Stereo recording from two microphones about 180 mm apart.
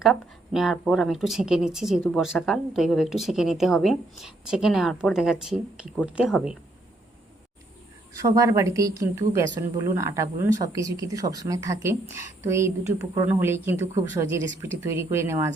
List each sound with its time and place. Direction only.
0.0 s speech: centre (ahead or behind)
8.2 s speech: 20° right (ahead or behind)